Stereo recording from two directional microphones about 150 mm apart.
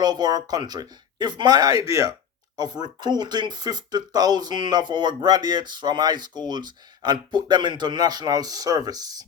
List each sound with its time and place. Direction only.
0.0 s speech: 30° right (ahead or behind)